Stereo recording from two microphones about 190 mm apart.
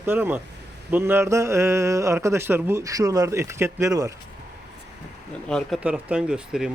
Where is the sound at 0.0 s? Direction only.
10° right (ahead or behind).